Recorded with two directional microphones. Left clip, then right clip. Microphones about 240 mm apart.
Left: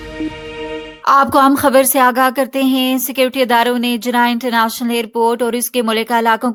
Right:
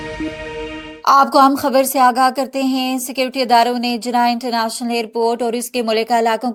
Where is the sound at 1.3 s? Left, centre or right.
Left.